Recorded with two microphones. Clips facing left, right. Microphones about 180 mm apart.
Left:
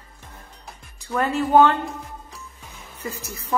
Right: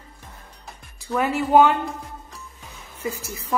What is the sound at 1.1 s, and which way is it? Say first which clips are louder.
Speech: even; 5° right (ahead or behind).